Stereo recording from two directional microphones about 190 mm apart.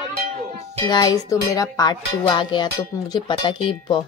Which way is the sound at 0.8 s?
20° left (ahead or behind).